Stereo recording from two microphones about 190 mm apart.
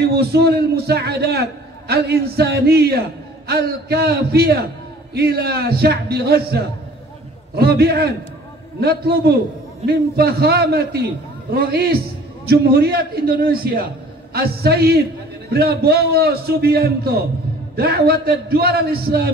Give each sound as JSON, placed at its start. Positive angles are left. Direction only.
{"t": 0.0, "sound": "a man's voice", "side_deg": -60}